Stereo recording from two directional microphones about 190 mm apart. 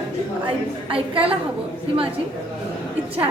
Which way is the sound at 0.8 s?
30° right (ahead or behind).